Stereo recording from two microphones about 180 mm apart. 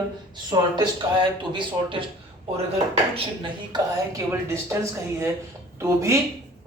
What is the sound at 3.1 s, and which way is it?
A woman's voice, 25° right (ahead or behind).